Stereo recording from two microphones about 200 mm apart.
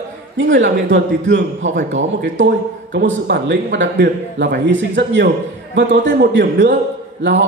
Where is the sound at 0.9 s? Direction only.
65° right (ahead or behind).